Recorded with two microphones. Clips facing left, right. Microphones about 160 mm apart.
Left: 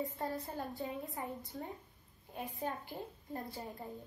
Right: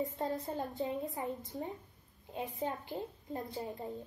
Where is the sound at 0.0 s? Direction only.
20° right (ahead or behind).